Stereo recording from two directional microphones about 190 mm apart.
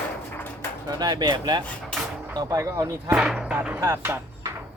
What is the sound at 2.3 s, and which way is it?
Speech, 20° right (ahead or behind).